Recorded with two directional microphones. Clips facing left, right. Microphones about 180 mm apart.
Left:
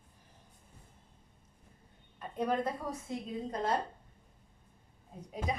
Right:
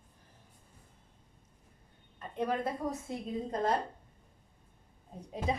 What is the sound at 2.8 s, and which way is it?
Speech, 15° right (ahead or behind).